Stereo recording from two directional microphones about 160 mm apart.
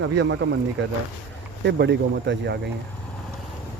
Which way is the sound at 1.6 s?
90° right.